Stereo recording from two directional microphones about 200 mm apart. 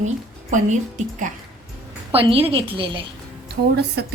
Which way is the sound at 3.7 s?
55° right (ahead or behind).